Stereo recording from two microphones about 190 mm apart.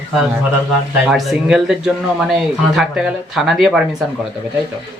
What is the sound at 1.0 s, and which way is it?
Speech, centre (ahead or behind).